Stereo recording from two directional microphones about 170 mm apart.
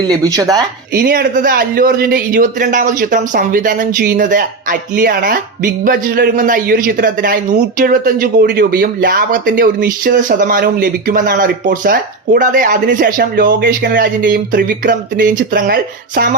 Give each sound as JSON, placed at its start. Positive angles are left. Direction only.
{"t": 0.1, "sound": "speech", "side_deg": -20}
{"t": 0.9, "sound": "speech", "side_deg": -60}